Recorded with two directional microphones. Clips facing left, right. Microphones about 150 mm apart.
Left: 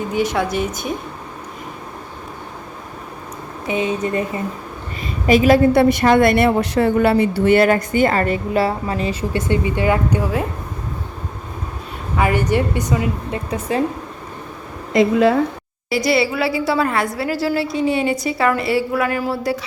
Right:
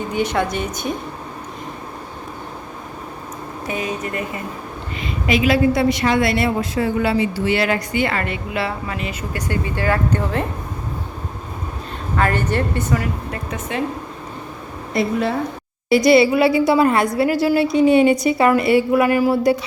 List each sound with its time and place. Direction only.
0.1 s speech: centre (ahead or behind)
3.7 s speech: 25° left (ahead or behind)
5.2 s a woman's voice: 40° left (ahead or behind)
5.7 s a woman's voice: 55° left (ahead or behind); by 10.4 s 10° left (ahead or behind)
12.1 s a woman's voice: 10° left (ahead or behind)
13.5 s speech: 35° left (ahead or behind)
14.9 s a woman's voice: 90° left
15.9 s a woman's voice: 20° right (ahead or behind)